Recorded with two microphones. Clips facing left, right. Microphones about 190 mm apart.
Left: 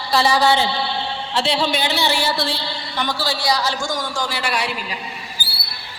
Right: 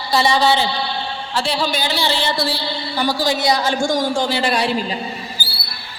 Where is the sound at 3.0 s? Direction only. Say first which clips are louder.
Right 4 dB; 15° right (ahead or behind).